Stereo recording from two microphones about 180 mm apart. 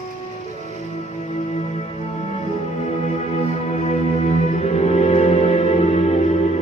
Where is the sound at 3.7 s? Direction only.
35° left (ahead or behind).